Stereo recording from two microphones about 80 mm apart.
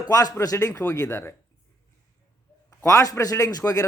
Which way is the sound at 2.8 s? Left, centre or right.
Left.